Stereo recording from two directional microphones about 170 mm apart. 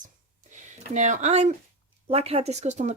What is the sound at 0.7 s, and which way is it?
Speech, 45° right (ahead or behind).